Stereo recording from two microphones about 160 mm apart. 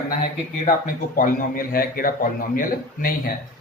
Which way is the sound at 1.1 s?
60° left (ahead or behind).